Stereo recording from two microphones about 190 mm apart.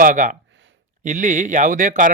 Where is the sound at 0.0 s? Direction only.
45° right (ahead or behind).